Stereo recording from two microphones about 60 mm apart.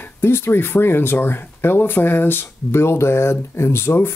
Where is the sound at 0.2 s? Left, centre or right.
Left.